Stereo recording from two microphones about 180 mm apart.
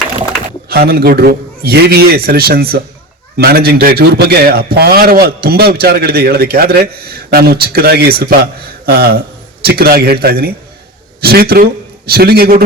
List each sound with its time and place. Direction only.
0.7 s a man's voice: 60° right (ahead or behind)